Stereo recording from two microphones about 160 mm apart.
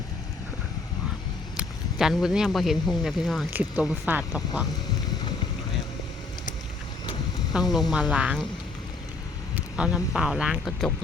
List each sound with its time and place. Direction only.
1.5 s speech: 5° right (ahead or behind)
3.5 s speech: 10° right (ahead or behind)
7.5 s speech: centre (ahead or behind)
9.6 s speech: 5° right (ahead or behind)